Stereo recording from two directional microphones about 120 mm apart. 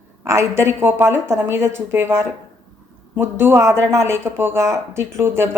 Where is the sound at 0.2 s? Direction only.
25° right (ahead or behind).